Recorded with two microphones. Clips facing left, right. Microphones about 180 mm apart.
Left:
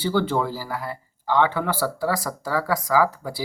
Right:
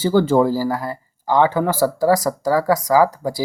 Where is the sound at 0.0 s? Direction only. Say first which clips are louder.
Right 7 dB; 45° right (ahead or behind).